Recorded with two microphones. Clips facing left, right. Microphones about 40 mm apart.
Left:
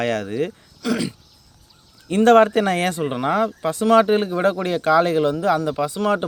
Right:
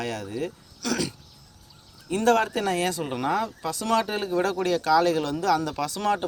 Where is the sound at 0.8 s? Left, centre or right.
Centre.